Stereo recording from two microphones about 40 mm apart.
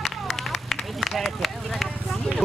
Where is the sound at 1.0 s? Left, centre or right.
Centre.